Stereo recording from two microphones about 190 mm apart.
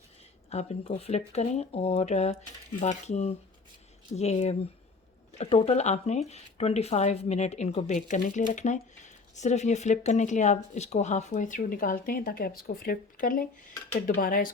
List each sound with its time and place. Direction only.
0.5 s speech: 35° left (ahead or behind); by 14.5 s 50° left (ahead or behind)